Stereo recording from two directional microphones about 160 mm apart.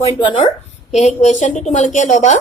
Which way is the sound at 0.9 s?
45° left (ahead or behind).